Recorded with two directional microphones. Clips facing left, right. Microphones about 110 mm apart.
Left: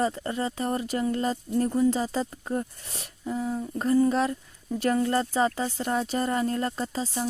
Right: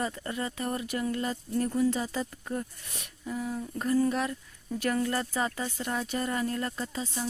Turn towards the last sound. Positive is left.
turn(degrees=35)  # may be behind; listen again after turning